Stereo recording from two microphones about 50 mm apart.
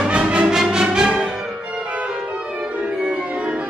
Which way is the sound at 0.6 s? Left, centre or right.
Centre.